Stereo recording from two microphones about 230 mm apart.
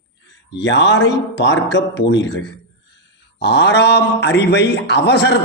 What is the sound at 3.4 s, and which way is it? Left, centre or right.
A man's voice, left.